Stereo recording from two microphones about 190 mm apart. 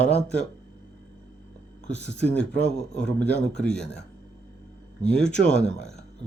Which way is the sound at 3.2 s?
5° left (ahead or behind).